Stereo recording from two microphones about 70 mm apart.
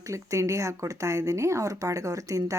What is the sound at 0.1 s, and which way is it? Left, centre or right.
Speech, right.